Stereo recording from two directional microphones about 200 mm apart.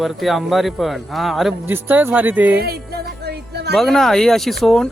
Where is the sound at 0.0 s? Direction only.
Centre (ahead or behind).